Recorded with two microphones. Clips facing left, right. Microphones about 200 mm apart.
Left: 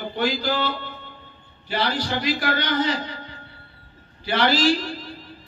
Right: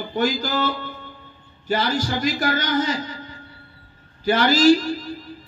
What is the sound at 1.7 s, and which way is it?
Speech, 45° right (ahead or behind).